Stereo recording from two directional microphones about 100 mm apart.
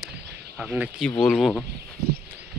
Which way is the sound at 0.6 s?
15° right (ahead or behind).